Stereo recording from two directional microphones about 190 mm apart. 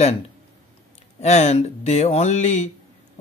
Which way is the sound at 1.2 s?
35° left (ahead or behind).